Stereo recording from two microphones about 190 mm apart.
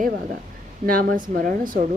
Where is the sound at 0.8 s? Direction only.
50° right (ahead or behind).